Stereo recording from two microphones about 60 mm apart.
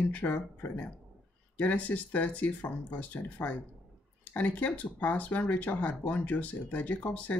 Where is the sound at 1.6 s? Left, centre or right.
Left.